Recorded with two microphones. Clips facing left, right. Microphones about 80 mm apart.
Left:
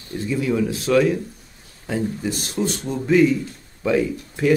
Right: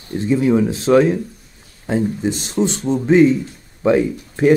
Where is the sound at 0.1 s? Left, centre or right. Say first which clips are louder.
Right 7 dB; right.